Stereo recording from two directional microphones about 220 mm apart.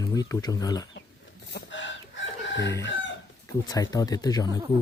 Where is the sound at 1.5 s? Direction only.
55° left (ahead or behind).